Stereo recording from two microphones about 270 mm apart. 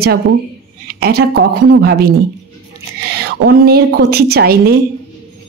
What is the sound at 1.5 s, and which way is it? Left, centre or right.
Speech, right.